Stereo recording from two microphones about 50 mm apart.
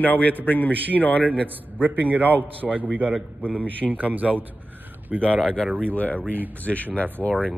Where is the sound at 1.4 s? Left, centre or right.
Right.